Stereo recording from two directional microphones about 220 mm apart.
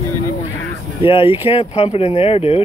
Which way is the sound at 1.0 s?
25° left (ahead or behind).